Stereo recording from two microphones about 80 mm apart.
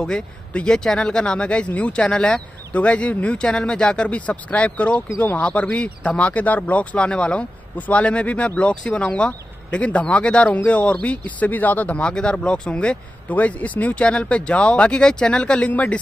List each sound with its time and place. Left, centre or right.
0.0 s speech: centre